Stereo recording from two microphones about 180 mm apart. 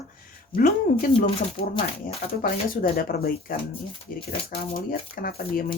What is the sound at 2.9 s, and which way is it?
Speech, 55° left (ahead or behind).